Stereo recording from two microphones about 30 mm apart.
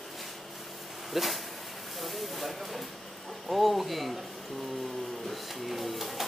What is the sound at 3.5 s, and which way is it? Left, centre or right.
Speech, centre.